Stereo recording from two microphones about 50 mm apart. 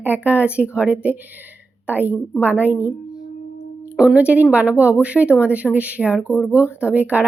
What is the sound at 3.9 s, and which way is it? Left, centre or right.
Speech, centre.